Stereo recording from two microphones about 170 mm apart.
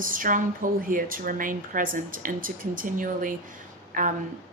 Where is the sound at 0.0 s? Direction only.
55° right (ahead or behind).